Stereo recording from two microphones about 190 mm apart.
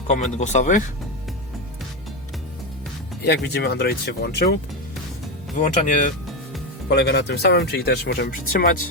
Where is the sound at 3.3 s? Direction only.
60° left (ahead or behind).